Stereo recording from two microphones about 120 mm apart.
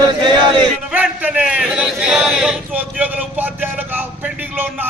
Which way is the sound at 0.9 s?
10° right (ahead or behind).